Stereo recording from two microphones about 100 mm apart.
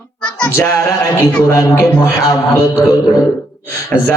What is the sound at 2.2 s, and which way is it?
Speech, 35° left (ahead or behind).